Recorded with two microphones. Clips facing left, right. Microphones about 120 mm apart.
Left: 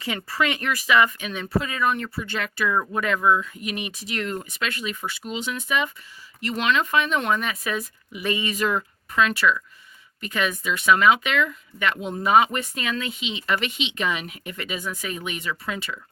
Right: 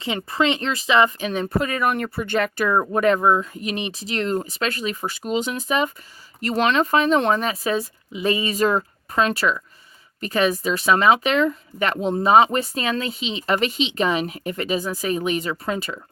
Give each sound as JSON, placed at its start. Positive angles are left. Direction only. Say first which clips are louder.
{"t": 0.0, "sound": "speech", "louder": "right 4 dB", "side_deg": -25}
{"t": 1.3, "sound": "speech", "louder": "right 4 dB", "side_deg": -45}